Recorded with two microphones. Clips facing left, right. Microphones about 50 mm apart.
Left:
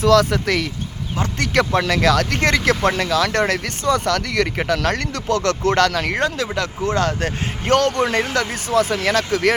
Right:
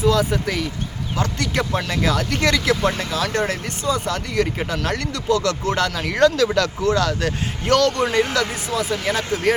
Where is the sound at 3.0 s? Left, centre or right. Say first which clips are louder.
Left 4 dB; left.